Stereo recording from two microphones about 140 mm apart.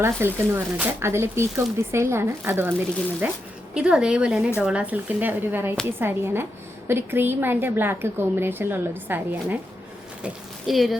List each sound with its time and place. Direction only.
0.2 s a woman's voice: 15° right (ahead or behind)
10.2 s speech: centre (ahead or behind)